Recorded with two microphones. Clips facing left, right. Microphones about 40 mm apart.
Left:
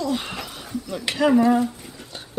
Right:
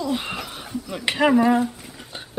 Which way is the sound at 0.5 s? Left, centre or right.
Right.